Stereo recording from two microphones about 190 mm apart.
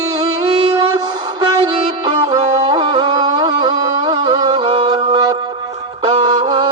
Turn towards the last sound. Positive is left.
turn(degrees=-25)  # may be behind; listen again after turning